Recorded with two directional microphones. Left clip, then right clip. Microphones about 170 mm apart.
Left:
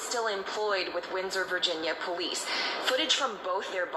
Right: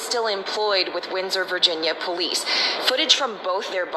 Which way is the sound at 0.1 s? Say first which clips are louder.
Right 7 dB; 20° right (ahead or behind).